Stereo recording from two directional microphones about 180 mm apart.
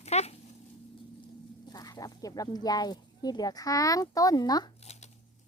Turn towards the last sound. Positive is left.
turn(degrees=20)  # may be behind; listen again after turning